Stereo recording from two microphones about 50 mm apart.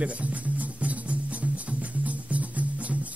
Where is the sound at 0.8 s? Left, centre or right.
Right.